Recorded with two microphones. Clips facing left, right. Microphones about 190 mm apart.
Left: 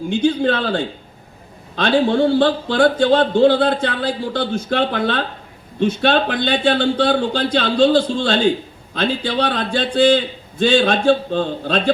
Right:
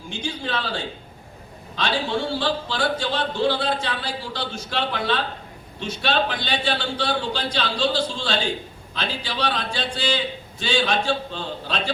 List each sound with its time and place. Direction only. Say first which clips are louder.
0.1 s a man's voice: left 12 dB; 55° left (ahead or behind)